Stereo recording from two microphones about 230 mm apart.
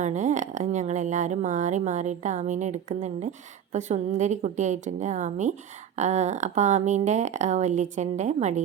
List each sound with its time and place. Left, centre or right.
0.0 s speech: right